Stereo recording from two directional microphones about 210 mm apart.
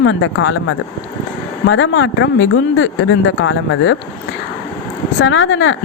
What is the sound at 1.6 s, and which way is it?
Speech, 65° left (ahead or behind).